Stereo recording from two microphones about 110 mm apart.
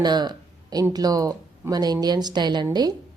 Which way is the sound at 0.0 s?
40° right (ahead or behind).